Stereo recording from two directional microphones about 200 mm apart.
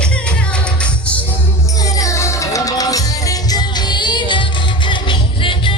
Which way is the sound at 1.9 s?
15° left (ahead or behind).